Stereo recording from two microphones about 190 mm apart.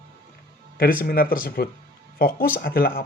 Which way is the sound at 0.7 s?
50° left (ahead or behind).